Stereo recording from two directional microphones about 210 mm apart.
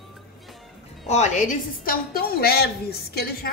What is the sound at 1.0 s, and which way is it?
A woman's voice, 35° left (ahead or behind).